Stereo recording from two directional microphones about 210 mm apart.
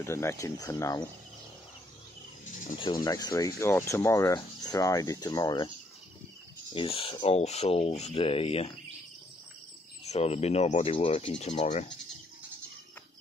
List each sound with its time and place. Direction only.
0.0 s speech: 10° left (ahead or behind)
2.8 s speech: 20° left (ahead or behind)
6.7 s speech: 25° left (ahead or behind)
10.0 s speech: 30° left (ahead or behind)